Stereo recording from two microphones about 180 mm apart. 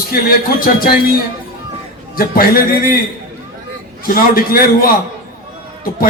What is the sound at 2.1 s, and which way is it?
Speech, 55° left (ahead or behind).